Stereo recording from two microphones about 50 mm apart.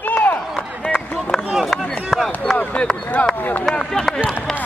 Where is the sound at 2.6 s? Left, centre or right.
Left.